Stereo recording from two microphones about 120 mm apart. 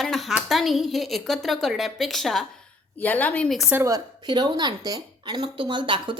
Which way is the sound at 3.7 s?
25° right (ahead or behind).